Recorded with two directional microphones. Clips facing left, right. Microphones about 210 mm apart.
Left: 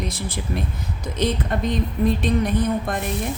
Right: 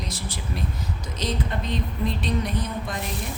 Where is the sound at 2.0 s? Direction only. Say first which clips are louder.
Left 7 dB; 50° left (ahead or behind).